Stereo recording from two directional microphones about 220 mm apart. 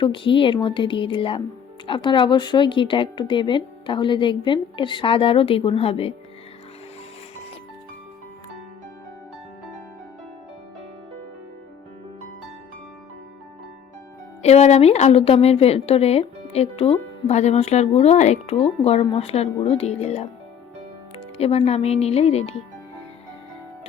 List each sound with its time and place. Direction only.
0.0 s a woman's voice: 20° left (ahead or behind)
14.4 s a woman's voice: 30° left (ahead or behind)
21.3 s a woman's voice: 25° left (ahead or behind)